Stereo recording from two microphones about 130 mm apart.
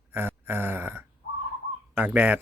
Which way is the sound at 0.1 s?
15° right (ahead or behind).